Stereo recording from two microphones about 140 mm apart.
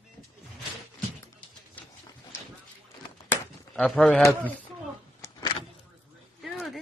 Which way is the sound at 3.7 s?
5° left (ahead or behind).